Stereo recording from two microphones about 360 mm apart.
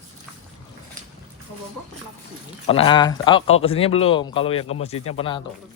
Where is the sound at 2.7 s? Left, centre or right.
Centre.